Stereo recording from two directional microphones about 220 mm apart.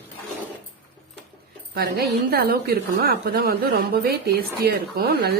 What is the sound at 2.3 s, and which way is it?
A woman's voice, 45° right (ahead or behind).